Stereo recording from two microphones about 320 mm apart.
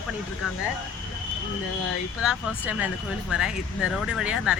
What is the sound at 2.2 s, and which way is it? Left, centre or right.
Speech, centre.